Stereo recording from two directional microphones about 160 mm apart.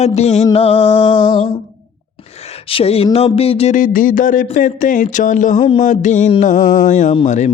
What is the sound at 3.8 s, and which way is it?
Speech, 55° left (ahead or behind).